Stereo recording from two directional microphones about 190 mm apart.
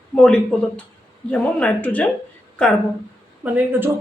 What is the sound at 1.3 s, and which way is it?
Speech, 5° left (ahead or behind).